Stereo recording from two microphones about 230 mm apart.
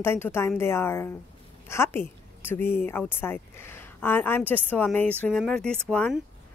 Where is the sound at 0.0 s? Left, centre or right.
Centre.